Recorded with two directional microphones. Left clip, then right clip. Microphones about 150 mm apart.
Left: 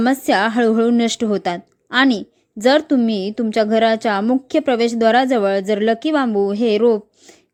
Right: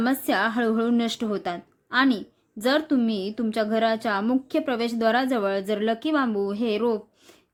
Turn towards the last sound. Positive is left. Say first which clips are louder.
# left 10 dB
turn(degrees=40)  # may be behind; listen again after turning